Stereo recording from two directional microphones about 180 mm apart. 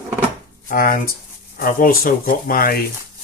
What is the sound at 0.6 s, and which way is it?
Speech, 50° left (ahead or behind).